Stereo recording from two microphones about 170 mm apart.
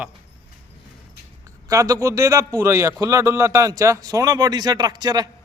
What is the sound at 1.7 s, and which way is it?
A man's voice, 20° right (ahead or behind).